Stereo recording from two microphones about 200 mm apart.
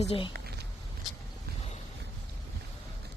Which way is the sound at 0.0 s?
30° left (ahead or behind).